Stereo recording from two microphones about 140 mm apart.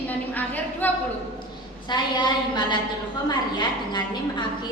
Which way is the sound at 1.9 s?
30° left (ahead or behind).